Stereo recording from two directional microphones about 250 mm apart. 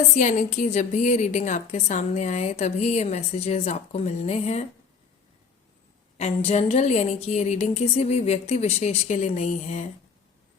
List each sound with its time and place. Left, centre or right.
0.2 s a woman's voice: left
6.1 s a woman's voice: left